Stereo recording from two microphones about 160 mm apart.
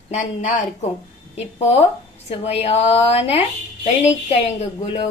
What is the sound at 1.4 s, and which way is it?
A woman's voice, 40° left (ahead or behind).